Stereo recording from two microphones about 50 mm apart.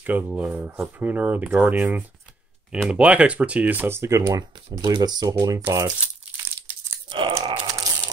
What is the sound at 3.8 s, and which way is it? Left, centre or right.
Speech, right.